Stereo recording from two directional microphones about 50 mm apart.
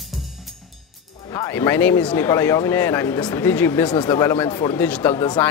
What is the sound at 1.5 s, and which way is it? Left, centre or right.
Speech, left.